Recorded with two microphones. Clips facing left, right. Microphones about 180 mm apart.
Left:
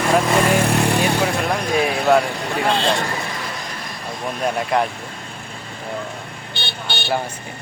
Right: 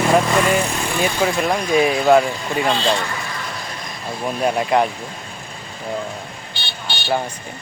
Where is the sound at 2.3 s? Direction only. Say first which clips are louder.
Even; 65° left (ahead or behind).